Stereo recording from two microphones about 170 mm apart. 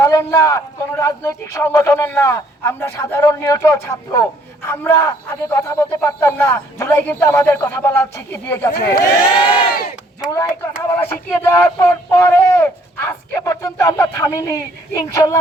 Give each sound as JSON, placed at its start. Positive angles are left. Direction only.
{"t": 0.0, "sound": "speech", "side_deg": 15}
{"t": 10.3, "sound": "speech", "side_deg": 15}